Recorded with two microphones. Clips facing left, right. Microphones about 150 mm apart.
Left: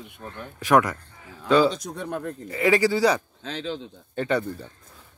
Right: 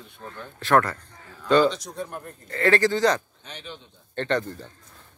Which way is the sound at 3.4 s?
90° left.